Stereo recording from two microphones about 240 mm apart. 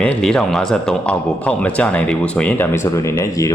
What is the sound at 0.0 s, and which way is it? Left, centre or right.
A man's voice, centre.